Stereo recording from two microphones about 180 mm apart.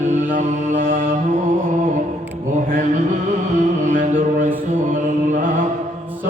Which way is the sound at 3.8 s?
45° right (ahead or behind).